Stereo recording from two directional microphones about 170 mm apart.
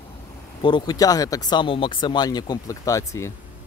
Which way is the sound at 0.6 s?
25° left (ahead or behind).